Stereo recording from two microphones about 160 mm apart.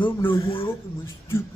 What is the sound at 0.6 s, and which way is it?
Speech, 15° left (ahead or behind).